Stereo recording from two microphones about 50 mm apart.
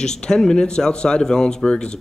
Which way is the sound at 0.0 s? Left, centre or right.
Centre.